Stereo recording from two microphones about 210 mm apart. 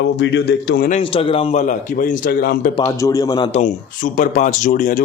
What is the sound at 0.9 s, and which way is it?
Speech, 30° left (ahead or behind).